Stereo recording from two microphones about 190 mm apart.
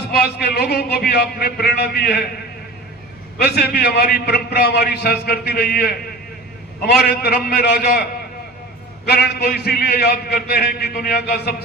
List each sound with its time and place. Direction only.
0.1 s a man's voice: 55° left (ahead or behind)
3.3 s a man's voice: 60° left (ahead or behind)
9.0 s a man's voice: 55° left (ahead or behind)